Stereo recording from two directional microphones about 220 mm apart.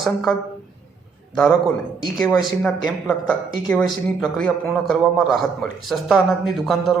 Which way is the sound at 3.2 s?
5° left (ahead or behind).